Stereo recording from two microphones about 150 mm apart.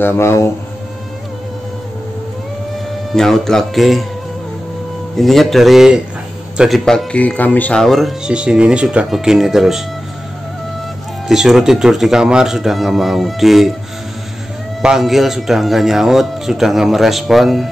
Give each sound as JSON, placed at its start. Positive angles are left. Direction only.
{"t": 0.0, "sound": "speech", "side_deg": 15}
{"t": 3.1, "sound": "speech", "side_deg": 5}
{"t": 5.1, "sound": "speech", "side_deg": 0}
{"t": 11.2, "sound": "speech", "side_deg": 0}
{"t": 14.8, "sound": "speech", "side_deg": -5}